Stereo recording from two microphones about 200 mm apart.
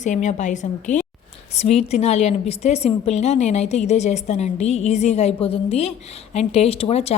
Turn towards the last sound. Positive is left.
turn(degrees=30)  # may be behind; listen again after turning